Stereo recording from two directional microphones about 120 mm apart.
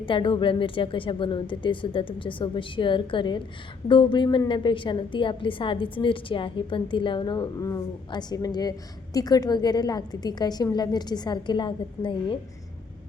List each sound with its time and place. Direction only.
0.0 s a woman's voice: 45° left (ahead or behind)
7.6 s a woman's voice: 30° left (ahead or behind)